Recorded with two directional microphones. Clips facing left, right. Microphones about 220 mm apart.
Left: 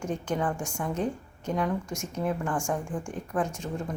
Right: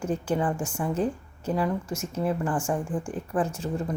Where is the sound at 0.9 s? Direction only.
30° right (ahead or behind).